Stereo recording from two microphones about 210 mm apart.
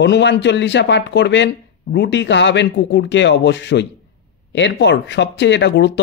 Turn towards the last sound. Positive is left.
turn(degrees=55)  # may be behind; listen again after turning